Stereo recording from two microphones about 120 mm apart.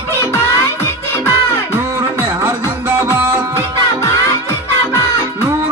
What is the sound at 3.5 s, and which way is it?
Music, 25° left (ahead or behind).